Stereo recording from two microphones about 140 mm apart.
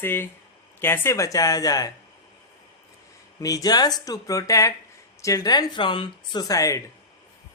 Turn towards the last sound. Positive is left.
turn(degrees=25)  # may be behind; listen again after turning